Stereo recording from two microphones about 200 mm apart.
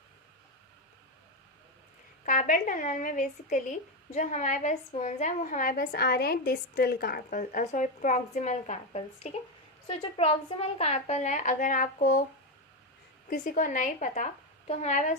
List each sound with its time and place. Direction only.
2.2 s speech: 40° left (ahead or behind)
13.3 s speech: 40° left (ahead or behind)